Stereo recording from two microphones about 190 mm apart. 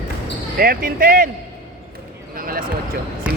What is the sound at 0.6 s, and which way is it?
Speech, 50° right (ahead or behind).